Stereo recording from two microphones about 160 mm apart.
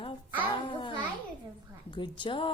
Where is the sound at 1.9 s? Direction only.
30° left (ahead or behind).